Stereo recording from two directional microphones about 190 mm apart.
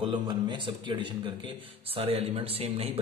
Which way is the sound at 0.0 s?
25° right (ahead or behind).